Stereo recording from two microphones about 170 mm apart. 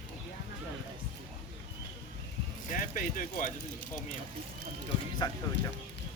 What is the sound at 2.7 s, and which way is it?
Speech, 50° left (ahead or behind).